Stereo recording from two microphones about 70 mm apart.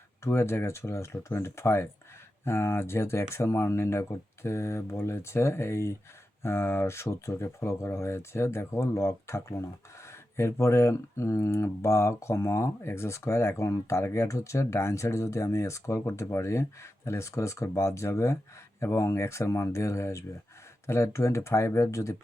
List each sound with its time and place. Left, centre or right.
0.3 s speech: left